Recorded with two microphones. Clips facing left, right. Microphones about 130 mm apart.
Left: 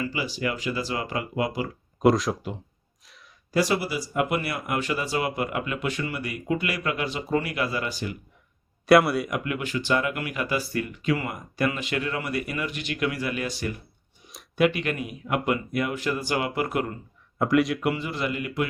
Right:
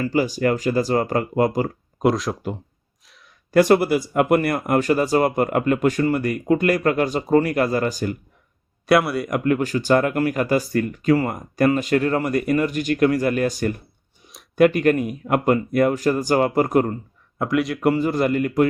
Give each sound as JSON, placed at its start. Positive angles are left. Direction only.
{"t": 0.0, "sound": "speech", "side_deg": -45}
{"t": 2.0, "sound": "speech", "side_deg": 0}
{"t": 3.5, "sound": "speech", "side_deg": -55}
{"t": 8.9, "sound": "speech", "side_deg": 0}
{"t": 9.3, "sound": "speech", "side_deg": -40}
{"t": 14.3, "sound": "a sound", "side_deg": 0}
{"t": 14.6, "sound": "speech", "side_deg": -45}
{"t": 17.3, "sound": "speech", "side_deg": 0}
{"t": 17.7, "sound": "speech", "side_deg": -40}